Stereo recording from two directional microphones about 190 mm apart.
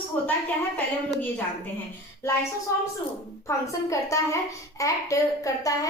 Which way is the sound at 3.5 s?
15° left (ahead or behind).